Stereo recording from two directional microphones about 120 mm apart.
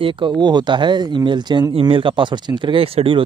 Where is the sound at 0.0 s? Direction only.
45° right (ahead or behind).